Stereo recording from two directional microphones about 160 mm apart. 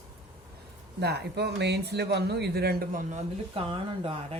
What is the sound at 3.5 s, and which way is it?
Speech, 35° right (ahead or behind).